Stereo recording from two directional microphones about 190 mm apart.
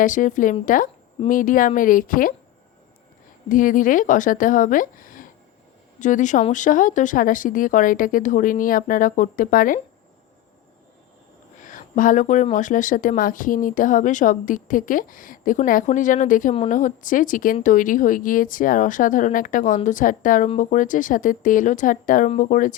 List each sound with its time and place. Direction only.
0.0 s speech: 45° left (ahead or behind)
3.5 s speech: 45° left (ahead or behind)
11.6 s speech: 40° left (ahead or behind)